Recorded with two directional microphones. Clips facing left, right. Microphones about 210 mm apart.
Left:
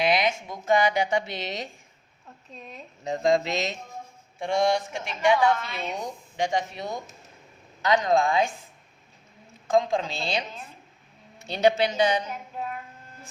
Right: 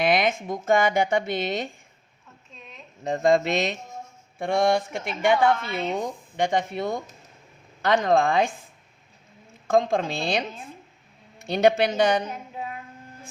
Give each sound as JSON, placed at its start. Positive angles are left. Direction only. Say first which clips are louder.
{"t": 0.0, "sound": "speech", "louder": "right 2 dB", "side_deg": -50}
{"t": 2.6, "sound": "speech", "louder": "left 4 dB", "side_deg": 35}
{"t": 3.0, "sound": "a woman's voice", "louder": "right 2 dB", "side_deg": -55}
{"t": 8.0, "sound": "a woman's voice", "louder": "right 3 dB", "side_deg": -55}
{"t": 9.7, "sound": "speech", "louder": "right 2 dB", "side_deg": -55}
{"t": 11.4, "sound": "a woman's voice", "louder": "right 2 dB", "side_deg": -55}